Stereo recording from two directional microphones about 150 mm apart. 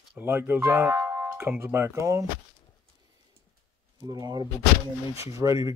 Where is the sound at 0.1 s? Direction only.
15° right (ahead or behind).